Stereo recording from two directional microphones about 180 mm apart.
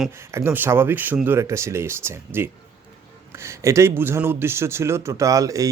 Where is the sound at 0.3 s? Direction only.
10° right (ahead or behind).